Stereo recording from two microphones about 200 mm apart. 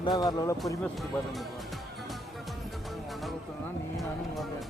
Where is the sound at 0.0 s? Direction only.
20° left (ahead or behind).